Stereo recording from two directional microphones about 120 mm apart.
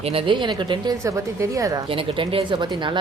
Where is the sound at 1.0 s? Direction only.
25° right (ahead or behind).